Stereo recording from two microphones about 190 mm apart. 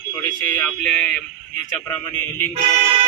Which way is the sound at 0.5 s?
5° left (ahead or behind).